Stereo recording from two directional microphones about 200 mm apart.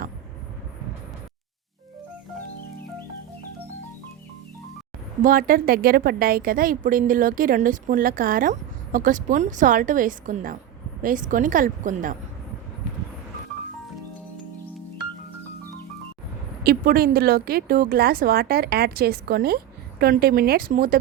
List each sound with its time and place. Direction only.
5.2 s a woman's voice: 45° right (ahead or behind)
16.6 s a woman's voice: 45° right (ahead or behind)